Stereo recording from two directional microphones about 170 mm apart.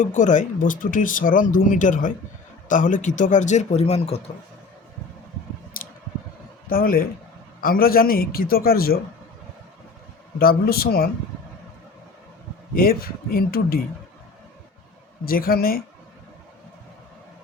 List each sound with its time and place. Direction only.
0.0 s speech: 45° left (ahead or behind)
5.7 s a sound: 55° left (ahead or behind)
6.7 s a man's voice: 60° left (ahead or behind)
10.4 s a man's voice: 60° left (ahead or behind)
12.7 s a man's voice: 60° left (ahead or behind)
15.2 s a man's voice: 60° left (ahead or behind)